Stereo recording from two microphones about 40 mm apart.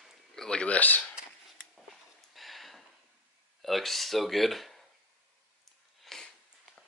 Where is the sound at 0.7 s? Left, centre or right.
Left.